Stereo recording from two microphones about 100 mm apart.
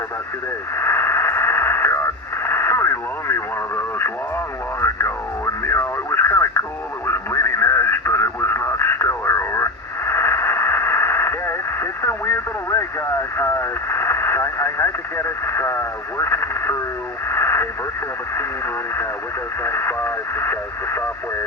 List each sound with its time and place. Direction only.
0.8 s radio: 25° left (ahead or behind)
4.8 s a sound: 30° left (ahead or behind)
5.6 s radio: 25° left (ahead or behind)
19.6 s speech: 25° left (ahead or behind)